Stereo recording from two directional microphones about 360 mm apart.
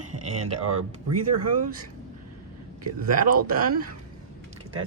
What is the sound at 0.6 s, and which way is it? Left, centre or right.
Speech, right.